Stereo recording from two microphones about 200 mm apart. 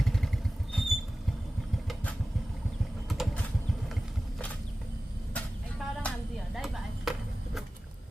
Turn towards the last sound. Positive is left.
turn(degrees=0)  # may be behind; listen again after turning